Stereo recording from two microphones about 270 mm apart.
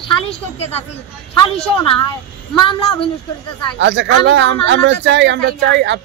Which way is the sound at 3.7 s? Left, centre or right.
Right.